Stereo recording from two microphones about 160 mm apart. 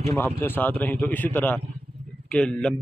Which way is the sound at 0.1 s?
15° left (ahead or behind).